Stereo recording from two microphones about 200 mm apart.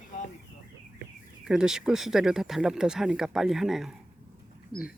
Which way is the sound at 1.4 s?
Centre (ahead or behind).